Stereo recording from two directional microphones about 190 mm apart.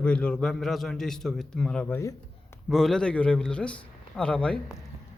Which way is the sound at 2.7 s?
Centre (ahead or behind).